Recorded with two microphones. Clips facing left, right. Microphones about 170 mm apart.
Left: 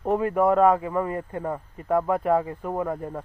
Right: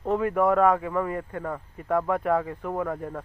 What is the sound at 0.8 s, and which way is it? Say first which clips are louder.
Speech: left 1 dB; 15° left (ahead or behind).